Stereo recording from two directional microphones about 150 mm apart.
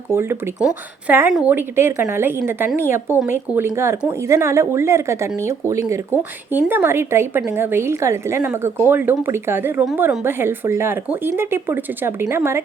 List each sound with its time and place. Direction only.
0.1 s speech: 15° right (ahead or behind)